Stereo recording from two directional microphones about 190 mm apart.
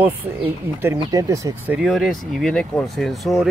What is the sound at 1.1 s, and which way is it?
Speech, 15° right (ahead or behind).